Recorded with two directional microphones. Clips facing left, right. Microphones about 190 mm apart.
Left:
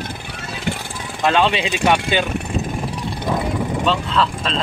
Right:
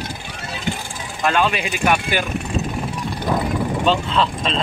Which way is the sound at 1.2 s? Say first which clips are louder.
Left 2 dB; 25° left (ahead or behind).